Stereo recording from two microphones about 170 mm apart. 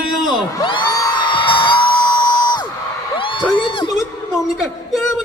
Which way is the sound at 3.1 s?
30° left (ahead or behind).